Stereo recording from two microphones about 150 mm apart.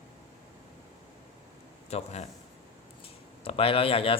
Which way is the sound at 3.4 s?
40° left (ahead or behind).